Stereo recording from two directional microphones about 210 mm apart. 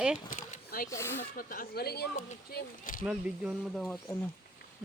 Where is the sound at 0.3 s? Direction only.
40° left (ahead or behind).